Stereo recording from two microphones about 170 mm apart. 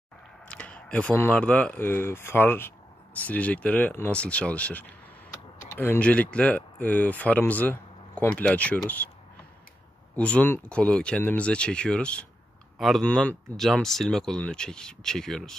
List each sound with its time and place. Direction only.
0.5 s speech: 5° left (ahead or behind)
10.1 s speech: 10° left (ahead or behind)